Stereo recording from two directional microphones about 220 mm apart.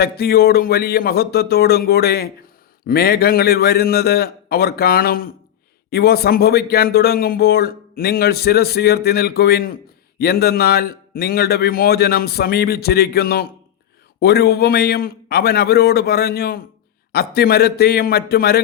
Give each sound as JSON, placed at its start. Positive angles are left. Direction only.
{"t": 0.0, "sound": "speech", "side_deg": 45}